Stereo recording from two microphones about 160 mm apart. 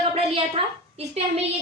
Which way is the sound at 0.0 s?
35° right (ahead or behind).